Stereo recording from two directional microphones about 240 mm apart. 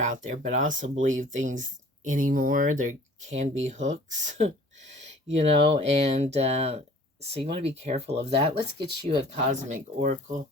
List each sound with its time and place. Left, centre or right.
0.0 s speech: right